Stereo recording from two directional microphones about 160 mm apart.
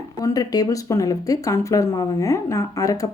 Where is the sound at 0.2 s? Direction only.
25° left (ahead or behind).